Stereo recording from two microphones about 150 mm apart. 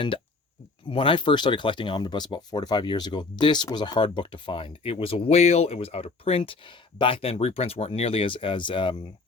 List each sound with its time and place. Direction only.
0.9 s speech: 35° left (ahead or behind)